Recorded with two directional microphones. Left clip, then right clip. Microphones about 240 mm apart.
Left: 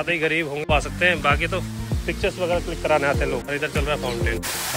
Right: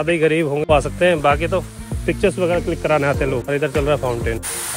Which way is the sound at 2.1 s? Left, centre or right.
Right.